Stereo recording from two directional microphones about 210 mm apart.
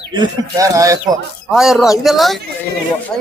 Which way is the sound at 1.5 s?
Centre (ahead or behind).